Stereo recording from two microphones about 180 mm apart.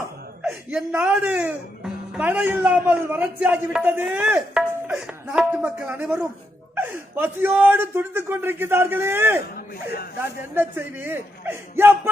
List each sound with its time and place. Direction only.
0.4 s speech: 5° right (ahead or behind)
9.6 s speech: 60° left (ahead or behind)
10.2 s speech: 10° right (ahead or behind)